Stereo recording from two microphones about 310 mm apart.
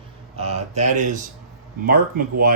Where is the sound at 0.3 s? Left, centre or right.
Right.